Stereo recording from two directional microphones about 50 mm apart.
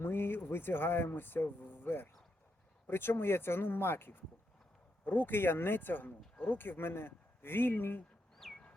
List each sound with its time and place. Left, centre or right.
0.0 s speech: left
8.4 s chicken: centre